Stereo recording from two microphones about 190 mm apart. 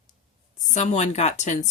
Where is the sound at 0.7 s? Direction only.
35° left (ahead or behind).